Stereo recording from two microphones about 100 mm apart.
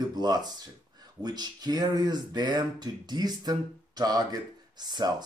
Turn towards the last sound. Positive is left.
turn(degrees=-45)  # may be behind; listen again after turning